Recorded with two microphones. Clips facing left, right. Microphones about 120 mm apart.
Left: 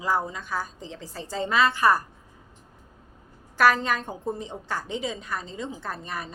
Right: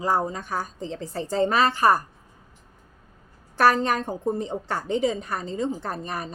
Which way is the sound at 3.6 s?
35° right (ahead or behind).